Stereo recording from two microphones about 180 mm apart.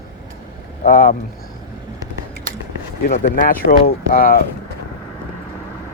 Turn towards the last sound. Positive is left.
turn(degrees=55)  # may be behind; listen again after turning